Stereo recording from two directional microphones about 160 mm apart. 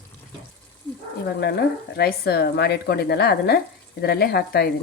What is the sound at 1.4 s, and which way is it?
Speech, 80° left.